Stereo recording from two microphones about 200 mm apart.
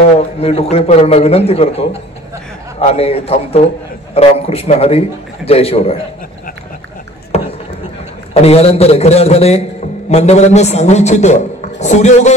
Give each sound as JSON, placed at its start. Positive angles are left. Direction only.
{"t": 0.4, "sound": "a man's voice", "side_deg": 30}
{"t": 7.3, "sound": "a sound", "side_deg": 30}
{"t": 8.3, "sound": "a man's voice", "side_deg": 30}